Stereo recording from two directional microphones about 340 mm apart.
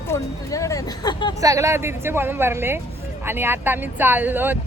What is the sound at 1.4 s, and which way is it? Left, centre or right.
Speech, centre.